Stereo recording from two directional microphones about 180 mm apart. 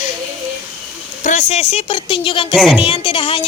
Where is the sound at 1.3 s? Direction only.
40° left (ahead or behind).